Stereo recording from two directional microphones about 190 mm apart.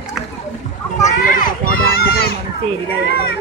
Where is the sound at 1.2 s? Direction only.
45° left (ahead or behind).